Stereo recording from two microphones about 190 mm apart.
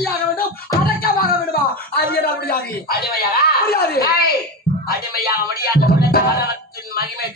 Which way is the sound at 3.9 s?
55° left (ahead or behind).